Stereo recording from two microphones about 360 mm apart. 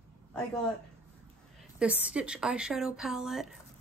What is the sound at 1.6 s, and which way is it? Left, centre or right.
A woman's voice, centre.